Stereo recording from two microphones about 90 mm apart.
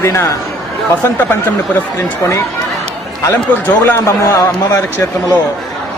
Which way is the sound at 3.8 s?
30° left (ahead or behind).